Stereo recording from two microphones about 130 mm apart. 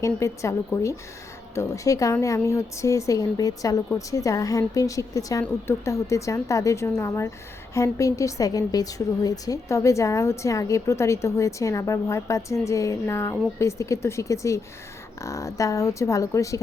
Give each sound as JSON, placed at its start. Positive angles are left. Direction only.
{"t": 0.0, "sound": "a woman's voice", "side_deg": 20}